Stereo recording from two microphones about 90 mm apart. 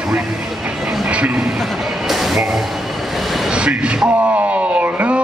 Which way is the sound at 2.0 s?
Centre (ahead or behind).